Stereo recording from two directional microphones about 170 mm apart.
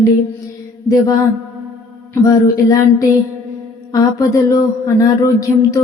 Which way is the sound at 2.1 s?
20° left (ahead or behind).